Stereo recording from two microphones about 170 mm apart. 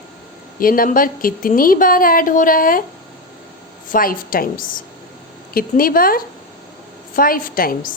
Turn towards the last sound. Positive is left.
turn(degrees=55)  # may be behind; listen again after turning